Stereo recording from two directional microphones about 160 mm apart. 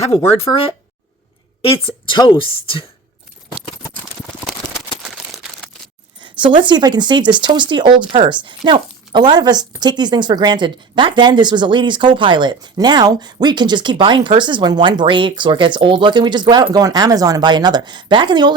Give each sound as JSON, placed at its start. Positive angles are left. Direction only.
{"t": 1.6, "sound": "a woman's voice", "side_deg": 30}
{"t": 6.1, "sound": "a woman's voice", "side_deg": -30}